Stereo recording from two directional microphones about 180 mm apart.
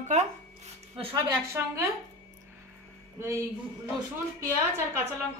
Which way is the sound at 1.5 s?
15° right (ahead or behind).